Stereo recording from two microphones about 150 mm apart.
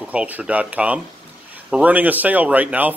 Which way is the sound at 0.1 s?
10° right (ahead or behind).